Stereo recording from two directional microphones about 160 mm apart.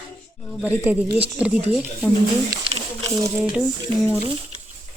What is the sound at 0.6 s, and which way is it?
Speech, 10° right (ahead or behind).